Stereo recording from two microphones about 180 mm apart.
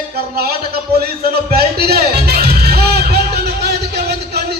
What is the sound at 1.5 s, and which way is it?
Music, 55° right (ahead or behind).